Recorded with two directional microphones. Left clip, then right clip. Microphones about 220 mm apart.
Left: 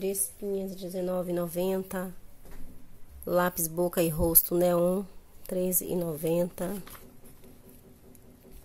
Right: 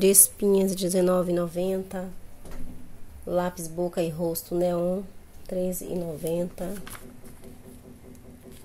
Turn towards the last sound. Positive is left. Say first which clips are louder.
# left 1 dB
turn(degrees=35)  # may be behind; listen again after turning